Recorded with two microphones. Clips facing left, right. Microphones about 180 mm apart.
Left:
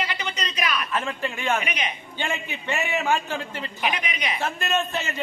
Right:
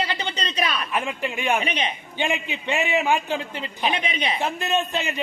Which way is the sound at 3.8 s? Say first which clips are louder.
Right 3 dB; 30° right (ahead or behind).